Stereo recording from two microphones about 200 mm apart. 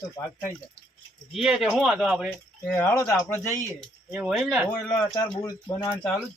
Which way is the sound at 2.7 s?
10° left (ahead or behind).